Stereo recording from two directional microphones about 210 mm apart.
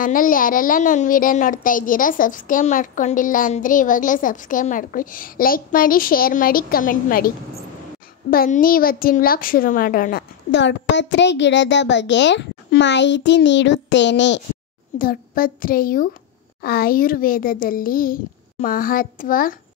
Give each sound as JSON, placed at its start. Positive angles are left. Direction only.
{"t": 0.0, "sound": "a woman's voice", "side_deg": 40}
{"t": 15.0, "sound": "a child's voice", "side_deg": 40}